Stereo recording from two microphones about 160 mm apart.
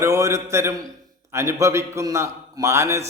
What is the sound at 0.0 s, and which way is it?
A man's voice, 20° right (ahead or behind).